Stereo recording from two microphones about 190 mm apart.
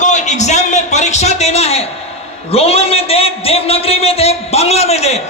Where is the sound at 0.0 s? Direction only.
40° left (ahead or behind).